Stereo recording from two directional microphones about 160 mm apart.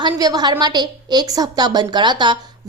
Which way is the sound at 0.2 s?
25° right (ahead or behind).